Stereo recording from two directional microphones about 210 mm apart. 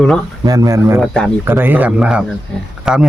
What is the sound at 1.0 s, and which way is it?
Speech, 5° left (ahead or behind).